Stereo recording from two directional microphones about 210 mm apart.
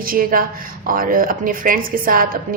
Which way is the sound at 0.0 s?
45° right (ahead or behind).